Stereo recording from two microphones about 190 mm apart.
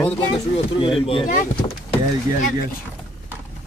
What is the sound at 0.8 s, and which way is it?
Speech, 30° left (ahead or behind).